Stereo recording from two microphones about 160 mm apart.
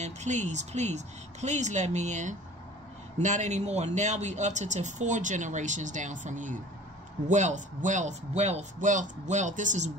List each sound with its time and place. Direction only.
0.0 s speech: 45° right (ahead or behind)